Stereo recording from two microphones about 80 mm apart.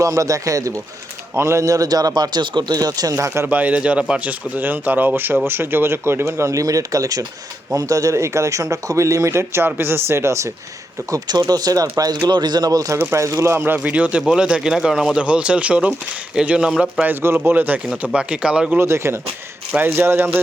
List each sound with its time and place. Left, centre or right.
0.0 s a man's voice: right
3.2 s speech: right
3.4 s speech: centre; by 10.5 s right
11.4 s a man's voice: right
12.3 s speech: right
13.0 s speech: right
13.7 s speech: centre
17.0 s speech: right
18.0 s speech: centre
18.8 s speech: right